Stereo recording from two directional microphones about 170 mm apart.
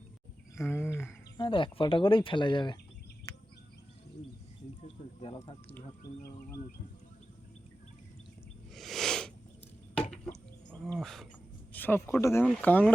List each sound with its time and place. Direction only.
0.7 s speech: 15° left (ahead or behind)
1.4 s speech: 30° left (ahead or behind)
3.3 s a sound: 15° left (ahead or behind)
5.2 s speech: 30° left (ahead or behind)
8.7 s a sound: centre (ahead or behind)
11.7 s speech: 10° left (ahead or behind)